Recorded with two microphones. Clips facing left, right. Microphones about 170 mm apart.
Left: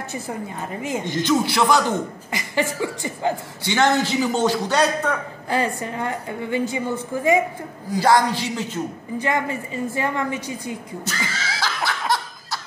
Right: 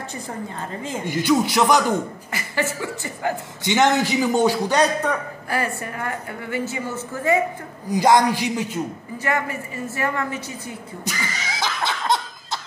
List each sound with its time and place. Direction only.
1.0 s a man's voice: 10° right (ahead or behind)
2.3 s a woman's voice: 15° left (ahead or behind)
3.6 s a man's voice: 15° right (ahead or behind)
5.5 s a woman's voice: 20° left (ahead or behind)
7.9 s a man's voice: 15° right (ahead or behind)
9.2 s a woman's voice: 15° left (ahead or behind)
11.2 s laughter: 15° right (ahead or behind)